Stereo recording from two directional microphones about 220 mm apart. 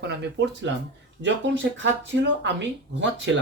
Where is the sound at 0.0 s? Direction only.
50° right (ahead or behind).